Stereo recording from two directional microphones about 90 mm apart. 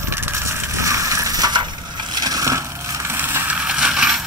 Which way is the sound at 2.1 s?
45° right (ahead or behind).